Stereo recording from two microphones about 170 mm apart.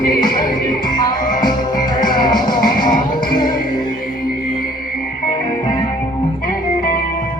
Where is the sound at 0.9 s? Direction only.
25° left (ahead or behind).